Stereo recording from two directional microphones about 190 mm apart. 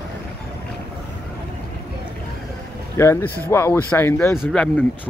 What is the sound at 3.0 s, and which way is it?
Speech, 15° left (ahead or behind).